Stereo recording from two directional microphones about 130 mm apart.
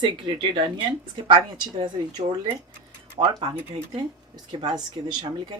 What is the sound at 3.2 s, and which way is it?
Speech, 45° right (ahead or behind).